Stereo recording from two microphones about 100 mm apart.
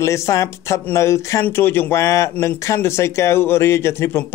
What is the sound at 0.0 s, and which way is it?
Speech, 30° left (ahead or behind).